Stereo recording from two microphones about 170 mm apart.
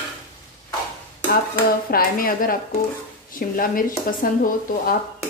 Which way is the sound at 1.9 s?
60° left (ahead or behind).